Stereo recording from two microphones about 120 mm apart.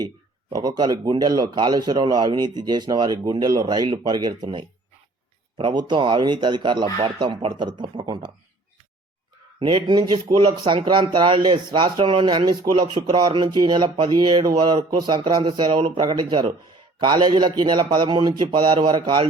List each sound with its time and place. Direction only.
0.5 s speech: 35° right (ahead or behind)
9.6 s speech: 40° right (ahead or behind)